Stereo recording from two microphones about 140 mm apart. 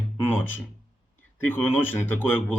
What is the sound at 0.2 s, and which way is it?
Speech, 15° left (ahead or behind).